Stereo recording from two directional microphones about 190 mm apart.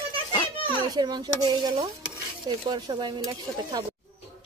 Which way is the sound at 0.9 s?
20° right (ahead or behind).